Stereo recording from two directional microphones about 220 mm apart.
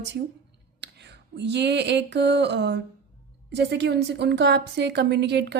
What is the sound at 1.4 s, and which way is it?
A woman's voice, 50° right (ahead or behind).